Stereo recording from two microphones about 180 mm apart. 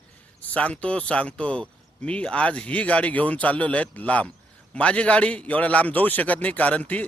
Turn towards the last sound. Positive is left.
turn(degrees=10)  # may be behind; listen again after turning